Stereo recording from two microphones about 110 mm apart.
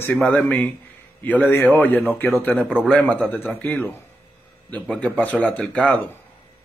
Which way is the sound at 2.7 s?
5° left (ahead or behind).